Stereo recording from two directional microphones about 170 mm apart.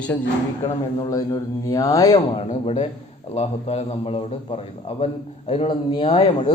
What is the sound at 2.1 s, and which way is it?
A man's voice, 35° left (ahead or behind).